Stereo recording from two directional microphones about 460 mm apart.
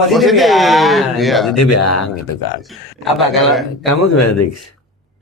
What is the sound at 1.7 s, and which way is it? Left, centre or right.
Speech, left.